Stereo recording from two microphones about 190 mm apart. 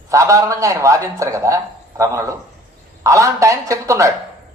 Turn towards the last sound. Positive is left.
turn(degrees=-15)  # may be behind; listen again after turning